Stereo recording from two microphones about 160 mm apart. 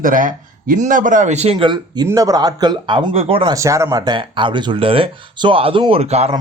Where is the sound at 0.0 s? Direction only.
55° right (ahead or behind); by 3.5 s 35° right (ahead or behind).